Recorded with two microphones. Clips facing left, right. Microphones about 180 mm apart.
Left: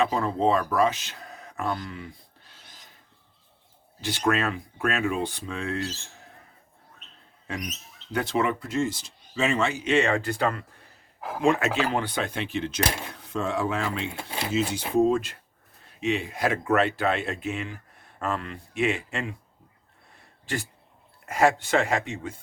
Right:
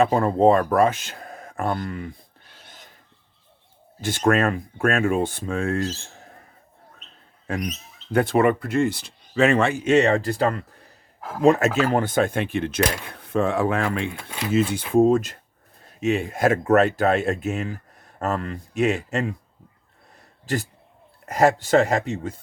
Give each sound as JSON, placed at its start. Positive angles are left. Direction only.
{"t": 0.0, "sound": "speech", "side_deg": -50}
{"t": 4.0, "sound": "speech", "side_deg": -50}
{"t": 8.1, "sound": "speech", "side_deg": -50}
{"t": 21.2, "sound": "speech", "side_deg": -40}